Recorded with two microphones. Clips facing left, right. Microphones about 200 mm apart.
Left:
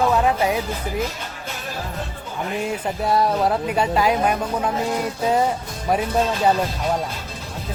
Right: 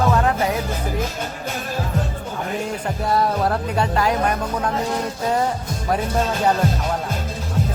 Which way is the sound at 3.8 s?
15° left (ahead or behind).